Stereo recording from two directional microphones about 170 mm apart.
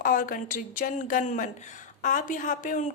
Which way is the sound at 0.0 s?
55° left (ahead or behind).